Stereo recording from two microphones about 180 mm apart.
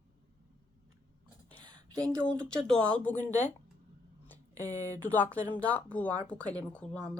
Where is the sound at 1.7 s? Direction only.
25° right (ahead or behind).